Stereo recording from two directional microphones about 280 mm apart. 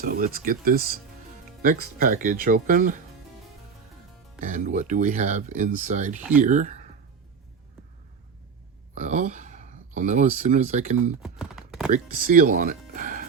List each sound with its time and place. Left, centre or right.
0.0 s speech: right
4.4 s speech: right
9.0 s speech: right
11.2 s a sound: centre
11.9 s speech: right